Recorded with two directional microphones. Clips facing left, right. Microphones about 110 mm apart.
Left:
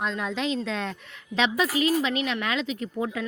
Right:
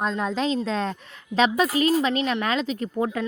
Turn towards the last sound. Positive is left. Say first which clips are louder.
# right 4 dB
turn(degrees=-45)  # may be behind; listen again after turning